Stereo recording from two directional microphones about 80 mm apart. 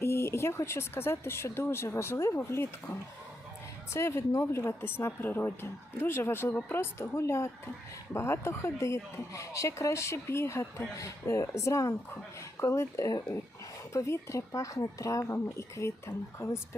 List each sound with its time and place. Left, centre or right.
0.0 s speech: left
3.9 s speech: left